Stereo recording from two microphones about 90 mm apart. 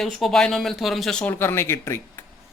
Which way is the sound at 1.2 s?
25° left (ahead or behind).